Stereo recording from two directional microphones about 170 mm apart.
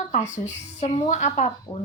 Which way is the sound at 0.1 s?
40° left (ahead or behind).